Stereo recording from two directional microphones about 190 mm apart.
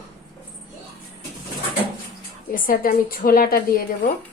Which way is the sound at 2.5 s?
45° left (ahead or behind).